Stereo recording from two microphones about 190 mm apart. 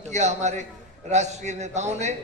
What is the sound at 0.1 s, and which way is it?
A man's voice, 35° right (ahead or behind).